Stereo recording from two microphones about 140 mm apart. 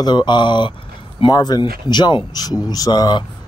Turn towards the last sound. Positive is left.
turn(degrees=30)  # may be behind; listen again after turning